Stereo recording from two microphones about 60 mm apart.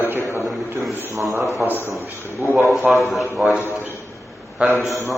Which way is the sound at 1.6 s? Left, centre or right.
Right.